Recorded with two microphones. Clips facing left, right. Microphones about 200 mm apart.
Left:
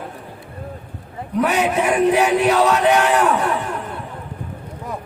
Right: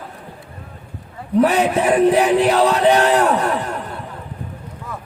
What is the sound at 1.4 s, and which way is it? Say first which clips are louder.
A man's voice: right 3 dB; 35° right (ahead or behind).